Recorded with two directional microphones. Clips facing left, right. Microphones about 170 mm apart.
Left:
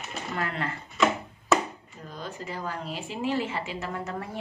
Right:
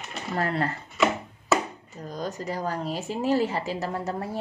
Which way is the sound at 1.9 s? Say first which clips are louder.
Right 6 dB; 40° right (ahead or behind).